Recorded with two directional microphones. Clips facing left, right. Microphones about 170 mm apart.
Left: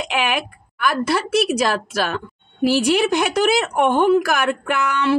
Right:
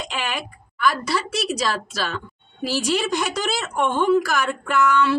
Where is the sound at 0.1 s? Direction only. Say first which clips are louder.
Left 6 dB; 65° left (ahead or behind).